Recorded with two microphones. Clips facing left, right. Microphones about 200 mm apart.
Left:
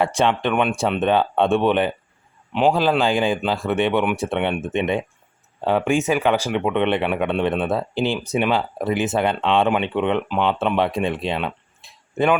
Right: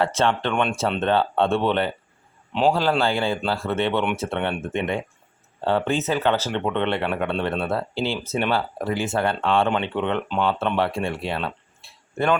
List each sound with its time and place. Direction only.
0.0 s speech: 15° left (ahead or behind)
2.5 s a man's voice: centre (ahead or behind)
3.0 s speech: 15° left (ahead or behind)